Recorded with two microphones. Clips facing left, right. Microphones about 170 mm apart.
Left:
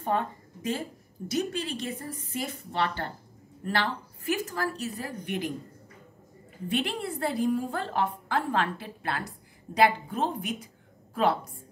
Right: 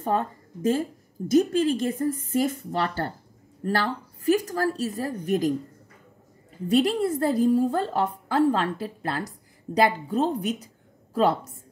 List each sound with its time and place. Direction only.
0.0 s a woman's voice: 40° right (ahead or behind)
6.7 s a woman's voice: 40° right (ahead or behind)